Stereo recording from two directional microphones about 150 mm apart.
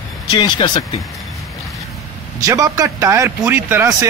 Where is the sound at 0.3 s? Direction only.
30° left (ahead or behind).